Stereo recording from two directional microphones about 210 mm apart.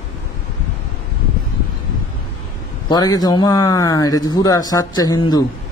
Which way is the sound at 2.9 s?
20° left (ahead or behind).